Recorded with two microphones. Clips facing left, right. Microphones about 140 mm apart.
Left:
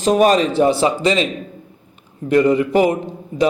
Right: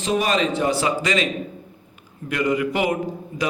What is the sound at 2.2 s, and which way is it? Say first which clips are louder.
Speech: left 8 dB; 30° left (ahead or behind).